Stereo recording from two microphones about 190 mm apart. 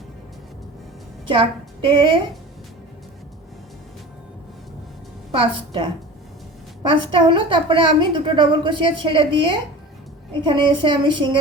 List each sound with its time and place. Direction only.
1.3 s a woman's voice: 25° right (ahead or behind)
5.3 s a woman's voice: 25° right (ahead or behind)
6.9 s a woman's voice: 25° right (ahead or behind)